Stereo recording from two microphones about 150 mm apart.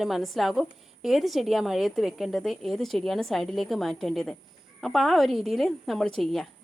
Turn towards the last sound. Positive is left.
turn(degrees=0)  # may be behind; listen again after turning